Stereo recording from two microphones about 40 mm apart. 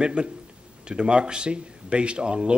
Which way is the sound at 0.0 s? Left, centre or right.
Right.